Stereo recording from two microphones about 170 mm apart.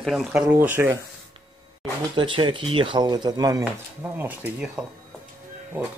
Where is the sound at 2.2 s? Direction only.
30° right (ahead or behind).